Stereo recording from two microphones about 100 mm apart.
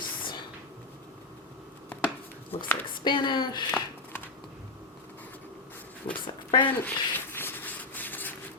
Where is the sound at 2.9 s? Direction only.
50° left (ahead or behind).